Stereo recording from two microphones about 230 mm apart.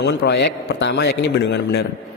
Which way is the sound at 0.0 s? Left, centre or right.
Left.